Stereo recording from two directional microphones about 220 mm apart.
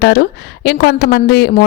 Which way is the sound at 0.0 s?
45° left (ahead or behind).